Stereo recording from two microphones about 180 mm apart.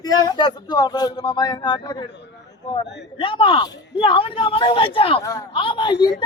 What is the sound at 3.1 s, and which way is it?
Speech, 30° left (ahead or behind).